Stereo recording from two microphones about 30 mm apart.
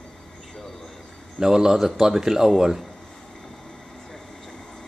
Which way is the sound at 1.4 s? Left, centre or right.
Centre.